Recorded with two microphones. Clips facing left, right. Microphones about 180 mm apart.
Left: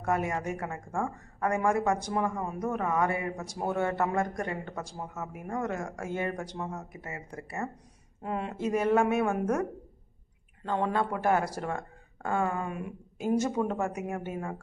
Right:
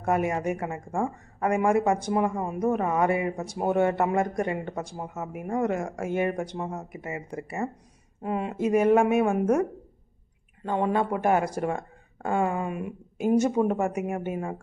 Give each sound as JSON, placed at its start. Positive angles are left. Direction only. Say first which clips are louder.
{"t": 0.0, "sound": "a woman's voice", "louder": "right 4 dB", "side_deg": -20}